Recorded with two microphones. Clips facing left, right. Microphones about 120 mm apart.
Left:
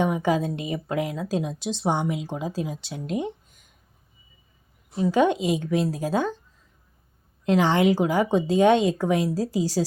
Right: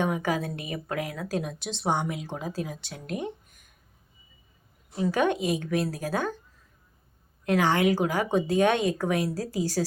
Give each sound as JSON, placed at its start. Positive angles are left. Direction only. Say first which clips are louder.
{"t": 0.0, "sound": "a woman's voice", "louder": "left 4 dB", "side_deg": 20}
{"t": 5.0, "sound": "speech", "louder": "left 4 dB", "side_deg": 20}
{"t": 7.4, "sound": "speech", "louder": "left 3 dB", "side_deg": 20}